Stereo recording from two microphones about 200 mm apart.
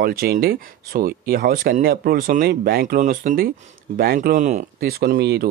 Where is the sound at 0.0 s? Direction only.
50° right (ahead or behind).